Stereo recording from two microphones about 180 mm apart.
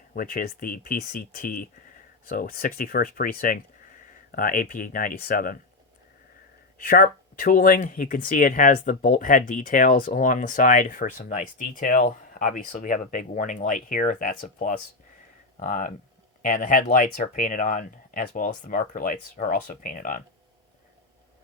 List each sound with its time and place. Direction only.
0.1 s speech: 50° left (ahead or behind)
6.8 s speech: 55° left (ahead or behind)